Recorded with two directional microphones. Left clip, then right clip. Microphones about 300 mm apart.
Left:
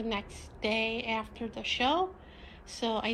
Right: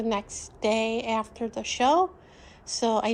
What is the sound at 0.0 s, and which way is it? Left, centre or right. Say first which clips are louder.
A woman's voice: right 7 dB; centre.